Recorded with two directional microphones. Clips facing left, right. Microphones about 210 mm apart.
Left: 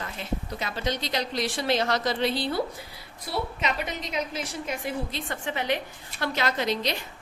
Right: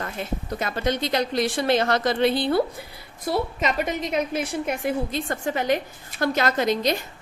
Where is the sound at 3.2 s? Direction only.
45° right (ahead or behind).